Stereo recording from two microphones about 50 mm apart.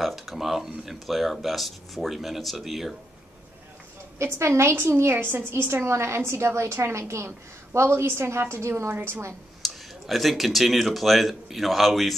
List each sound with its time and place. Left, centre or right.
0.0 s speech: centre
4.2 s a woman's voice: right
8.9 s a woman's voice: right
9.6 s speech: centre